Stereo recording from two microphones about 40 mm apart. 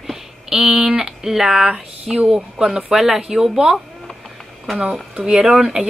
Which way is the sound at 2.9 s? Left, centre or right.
Centre.